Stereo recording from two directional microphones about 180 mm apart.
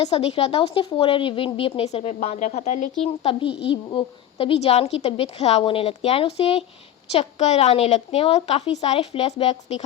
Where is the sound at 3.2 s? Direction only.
30° left (ahead or behind).